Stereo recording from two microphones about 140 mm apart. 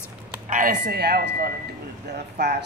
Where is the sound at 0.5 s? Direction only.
70° right (ahead or behind).